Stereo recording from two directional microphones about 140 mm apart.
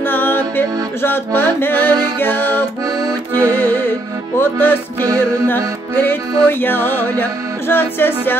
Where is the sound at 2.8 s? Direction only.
25° right (ahead or behind).